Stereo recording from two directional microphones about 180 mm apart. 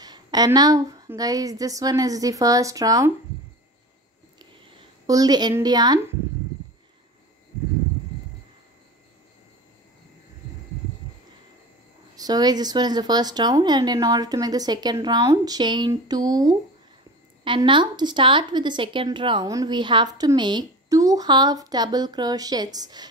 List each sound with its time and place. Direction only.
0.0 s speech: 20° right (ahead or behind)
4.4 s a sound: 20° right (ahead or behind)
12.2 s speech: 20° right (ahead or behind)